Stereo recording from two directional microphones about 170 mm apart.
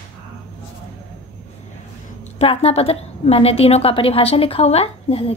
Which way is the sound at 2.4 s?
35° left (ahead or behind).